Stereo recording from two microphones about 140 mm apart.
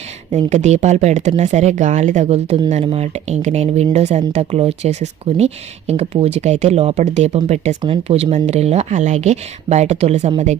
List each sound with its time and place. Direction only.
0.3 s speech: 55° right (ahead or behind)